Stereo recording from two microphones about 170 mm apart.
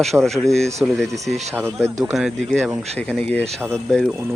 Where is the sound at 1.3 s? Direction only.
40° right (ahead or behind).